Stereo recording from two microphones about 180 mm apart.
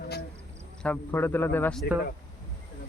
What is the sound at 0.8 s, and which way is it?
A man's voice, 10° left (ahead or behind).